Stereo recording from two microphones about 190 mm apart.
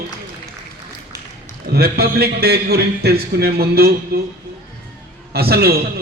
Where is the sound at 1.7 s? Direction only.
55° right (ahead or behind).